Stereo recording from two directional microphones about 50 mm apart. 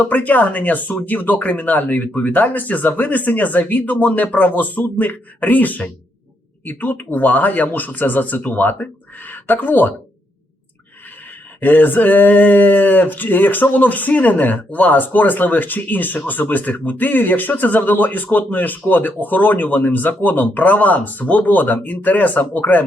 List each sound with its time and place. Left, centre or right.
0.0 s speech: left
11.6 s speech: left